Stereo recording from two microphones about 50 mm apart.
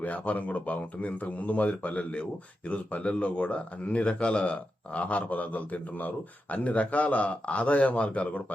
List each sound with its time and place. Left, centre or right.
0.0 s a man's voice: left